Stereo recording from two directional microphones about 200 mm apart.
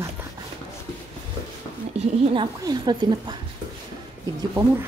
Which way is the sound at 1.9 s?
25° right (ahead or behind).